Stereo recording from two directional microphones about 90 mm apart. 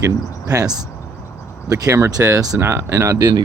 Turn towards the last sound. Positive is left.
turn(degrees=-40)  # may be behind; listen again after turning